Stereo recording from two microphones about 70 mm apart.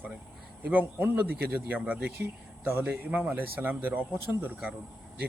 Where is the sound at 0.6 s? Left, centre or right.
Right.